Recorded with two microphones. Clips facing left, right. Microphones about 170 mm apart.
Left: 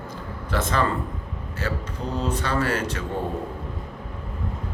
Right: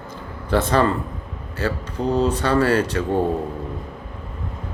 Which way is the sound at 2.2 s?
30° right (ahead or behind).